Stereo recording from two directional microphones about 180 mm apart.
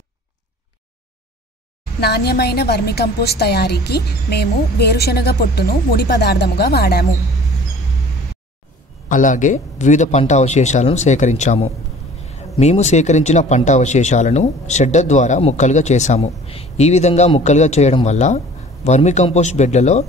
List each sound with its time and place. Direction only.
2.0 s a woman's voice: 65° left (ahead or behind)
9.1 s speech: 45° left (ahead or behind)